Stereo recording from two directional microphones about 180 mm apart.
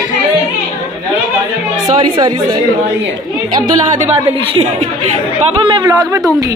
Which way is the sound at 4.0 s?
35° right (ahead or behind).